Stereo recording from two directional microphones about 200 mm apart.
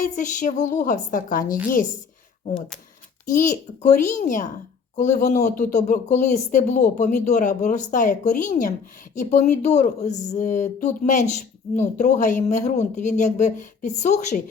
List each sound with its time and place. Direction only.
0.0 s speech: 40° left (ahead or behind)
3.3 s speech: 40° left (ahead or behind)